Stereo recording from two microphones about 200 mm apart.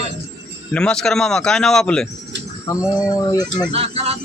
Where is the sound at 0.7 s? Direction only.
5° left (ahead or behind).